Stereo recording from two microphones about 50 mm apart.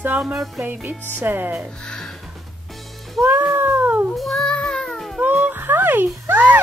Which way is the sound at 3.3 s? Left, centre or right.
Right.